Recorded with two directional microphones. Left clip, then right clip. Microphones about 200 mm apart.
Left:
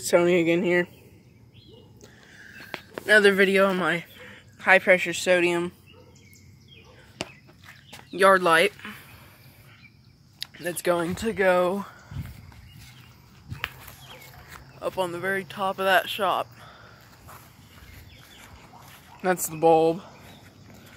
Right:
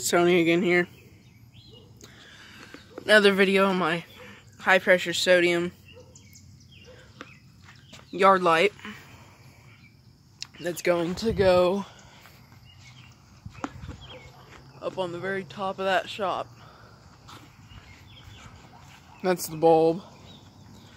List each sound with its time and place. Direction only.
0.0 s speech: 5° right (ahead or behind)
2.0 s a sound: 10° right (ahead or behind)
3.1 s a man's voice: 15° right (ahead or behind)
8.1 s speech: 5° right (ahead or behind)
10.4 s speech: 10° right (ahead or behind)
14.8 s speech: 15° left (ahead or behind)
19.6 s speech: 10° right (ahead or behind)